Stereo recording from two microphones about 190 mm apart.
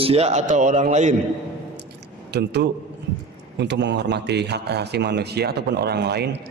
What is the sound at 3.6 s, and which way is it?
A man's voice, 65° right (ahead or behind).